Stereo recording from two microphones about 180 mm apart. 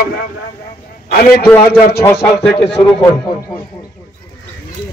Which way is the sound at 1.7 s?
60° left (ahead or behind).